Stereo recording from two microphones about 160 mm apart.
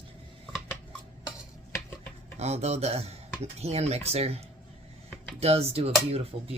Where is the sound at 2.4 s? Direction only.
40° right (ahead or behind).